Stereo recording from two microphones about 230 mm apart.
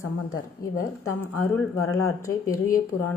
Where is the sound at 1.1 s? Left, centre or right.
Left.